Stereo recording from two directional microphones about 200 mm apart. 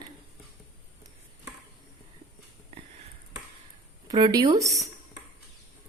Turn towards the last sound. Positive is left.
turn(degrees=-15)  # may be behind; listen again after turning